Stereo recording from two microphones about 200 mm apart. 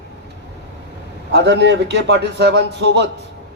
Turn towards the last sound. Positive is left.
turn(degrees=-60)  # may be behind; listen again after turning